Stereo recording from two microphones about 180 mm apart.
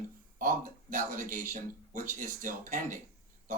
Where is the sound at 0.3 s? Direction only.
50° right (ahead or behind).